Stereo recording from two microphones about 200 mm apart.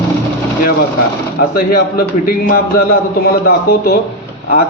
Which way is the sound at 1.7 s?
50° left (ahead or behind).